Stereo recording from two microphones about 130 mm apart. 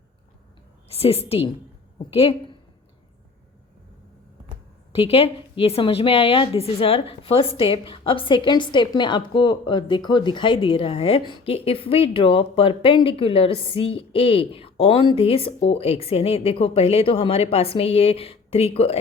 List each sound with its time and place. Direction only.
0.9 s a woman's voice: 50° left (ahead or behind)
4.9 s a woman's voice: 50° left (ahead or behind)